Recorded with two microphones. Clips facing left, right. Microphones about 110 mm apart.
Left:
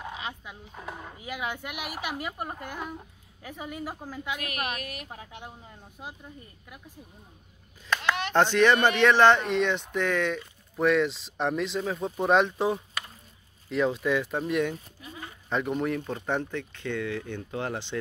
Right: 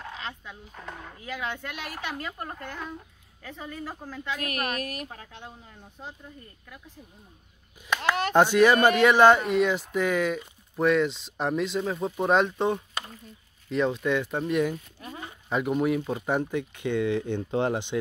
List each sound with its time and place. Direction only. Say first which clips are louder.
0.0 s speech: left 1 dB; 10° left (ahead or behind)
4.7 s a woman's voice: right 5 dB; 40° right (ahead or behind)
5.0 s speech: even; 10° left (ahead or behind)
8.4 s speech: right 2 dB; 10° right (ahead or behind)
15.0 s speech: right 4 dB; 45° right (ahead or behind)
15.5 s speech: right 3 dB; 5° right (ahead or behind)